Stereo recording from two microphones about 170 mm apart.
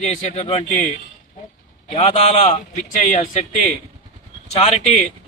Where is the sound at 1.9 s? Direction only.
40° left (ahead or behind).